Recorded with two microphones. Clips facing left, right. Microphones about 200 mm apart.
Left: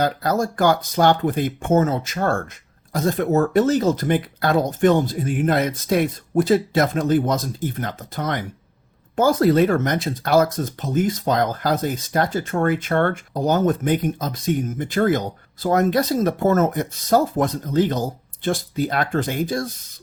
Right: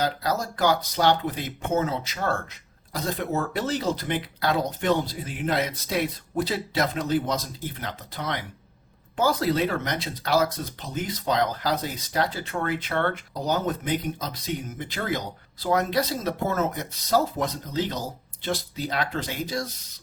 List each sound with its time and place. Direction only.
0.0 s speech: 50° left (ahead or behind)